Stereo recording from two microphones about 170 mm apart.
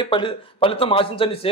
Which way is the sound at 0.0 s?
30° left (ahead or behind).